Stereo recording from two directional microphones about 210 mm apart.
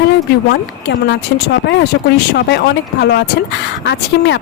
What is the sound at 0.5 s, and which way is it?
Speech, 55° left (ahead or behind).